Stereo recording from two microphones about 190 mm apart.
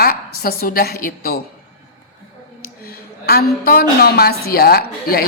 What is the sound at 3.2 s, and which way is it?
A woman's voice, 55° left (ahead or behind).